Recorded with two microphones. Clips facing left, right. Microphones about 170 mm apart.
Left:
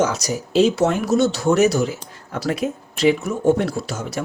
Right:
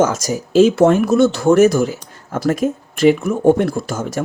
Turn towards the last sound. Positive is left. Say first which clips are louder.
# right 4 dB
turn(degrees=-50)  # may be behind; listen again after turning